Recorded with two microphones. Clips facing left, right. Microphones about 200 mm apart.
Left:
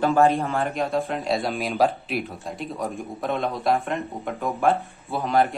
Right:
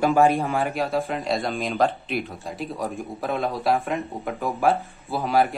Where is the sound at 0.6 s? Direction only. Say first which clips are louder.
Even; centre (ahead or behind).